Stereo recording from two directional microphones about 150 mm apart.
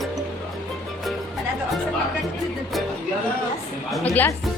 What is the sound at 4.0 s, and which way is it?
Music, 10° left (ahead or behind).